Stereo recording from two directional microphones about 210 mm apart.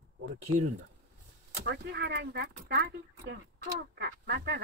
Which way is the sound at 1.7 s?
50° right (ahead or behind).